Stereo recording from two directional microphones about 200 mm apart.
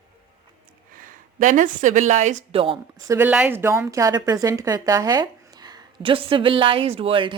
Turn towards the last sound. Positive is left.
turn(degrees=-25)  # may be behind; listen again after turning